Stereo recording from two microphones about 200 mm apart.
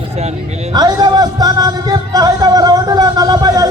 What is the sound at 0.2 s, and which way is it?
Speech, 30° right (ahead or behind).